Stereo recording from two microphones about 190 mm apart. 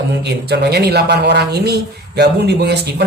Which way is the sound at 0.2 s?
60° right (ahead or behind).